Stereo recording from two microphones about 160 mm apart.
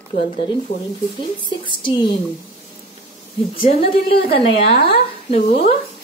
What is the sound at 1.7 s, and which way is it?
Speech, 30° left (ahead or behind).